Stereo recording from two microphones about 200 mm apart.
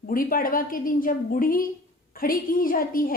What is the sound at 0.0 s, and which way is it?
A woman's voice, 45° left (ahead or behind).